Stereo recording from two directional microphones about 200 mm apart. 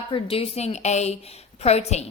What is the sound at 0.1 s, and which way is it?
A woman's voice, 30° left (ahead or behind).